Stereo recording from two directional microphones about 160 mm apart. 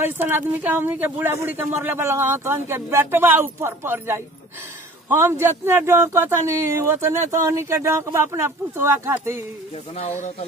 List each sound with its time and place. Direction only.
0.0 s speech: 15° right (ahead or behind)
9.9 s speech: 45° left (ahead or behind)